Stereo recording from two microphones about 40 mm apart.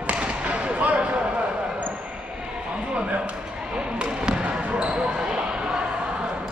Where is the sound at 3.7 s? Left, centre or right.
Right.